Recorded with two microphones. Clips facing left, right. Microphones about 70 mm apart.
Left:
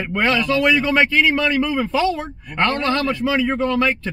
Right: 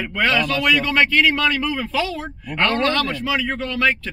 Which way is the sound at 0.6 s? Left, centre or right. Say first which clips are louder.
Left 2 dB; left.